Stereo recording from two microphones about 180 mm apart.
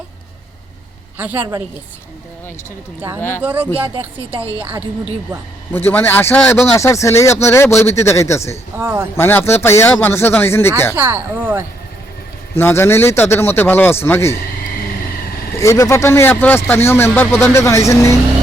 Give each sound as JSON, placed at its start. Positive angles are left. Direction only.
{"t": 1.2, "sound": "speech", "side_deg": -10}
{"t": 3.2, "sound": "speech", "side_deg": 10}
{"t": 3.4, "sound": "speech", "side_deg": -10}
{"t": 4.4, "sound": "a woman's voice", "side_deg": -30}
{"t": 5.7, "sound": "speech", "side_deg": 10}
{"t": 8.8, "sound": "speech", "side_deg": -10}
{"t": 9.1, "sound": "speech", "side_deg": 10}
{"t": 10.9, "sound": "speech", "side_deg": -10}
{"t": 12.5, "sound": "speech", "side_deg": 15}
{"t": 15.5, "sound": "speech", "side_deg": 15}